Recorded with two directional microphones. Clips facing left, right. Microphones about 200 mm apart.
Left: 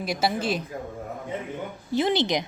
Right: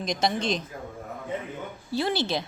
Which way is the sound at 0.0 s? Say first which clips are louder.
Left 1 dB; 5° left (ahead or behind).